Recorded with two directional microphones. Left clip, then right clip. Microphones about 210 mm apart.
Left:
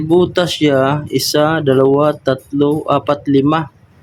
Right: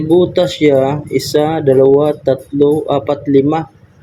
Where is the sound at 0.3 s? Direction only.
20° left (ahead or behind).